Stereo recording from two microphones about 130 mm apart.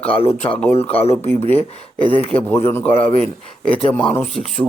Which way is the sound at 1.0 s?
50° left (ahead or behind).